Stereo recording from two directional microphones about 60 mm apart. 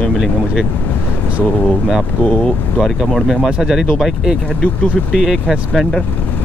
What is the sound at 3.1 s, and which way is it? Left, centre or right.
Speech, centre.